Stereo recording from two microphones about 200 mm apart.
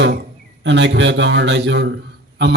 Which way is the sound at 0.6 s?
65° right (ahead or behind).